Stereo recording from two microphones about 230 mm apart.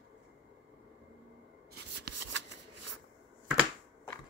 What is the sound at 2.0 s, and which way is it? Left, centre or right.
Shuffling cards, right.